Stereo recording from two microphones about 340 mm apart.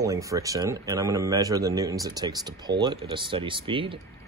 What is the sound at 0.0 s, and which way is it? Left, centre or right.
Speech, centre.